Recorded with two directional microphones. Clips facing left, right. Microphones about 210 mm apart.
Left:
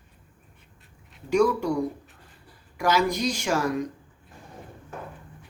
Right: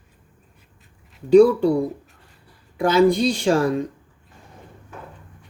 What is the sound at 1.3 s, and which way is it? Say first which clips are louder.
Speech: right 9 dB; 30° right (ahead or behind).